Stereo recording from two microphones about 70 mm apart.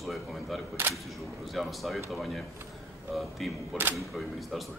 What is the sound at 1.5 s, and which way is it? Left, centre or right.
Speech, centre.